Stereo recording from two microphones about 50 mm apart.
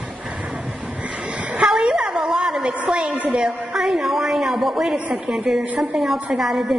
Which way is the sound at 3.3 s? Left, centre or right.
Centre.